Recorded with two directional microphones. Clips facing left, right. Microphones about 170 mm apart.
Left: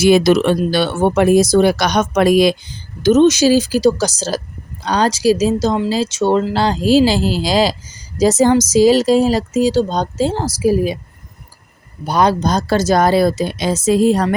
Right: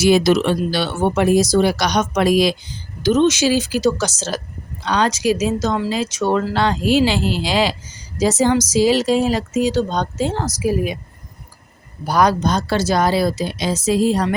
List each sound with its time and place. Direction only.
0.0 s speech: 55° left (ahead or behind); by 10.9 s 35° left (ahead or behind)
12.0 s speech: 25° left (ahead or behind); by 14.3 s 50° left (ahead or behind)